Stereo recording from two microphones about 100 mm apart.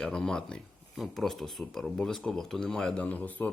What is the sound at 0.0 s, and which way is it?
Speech, 10° left (ahead or behind).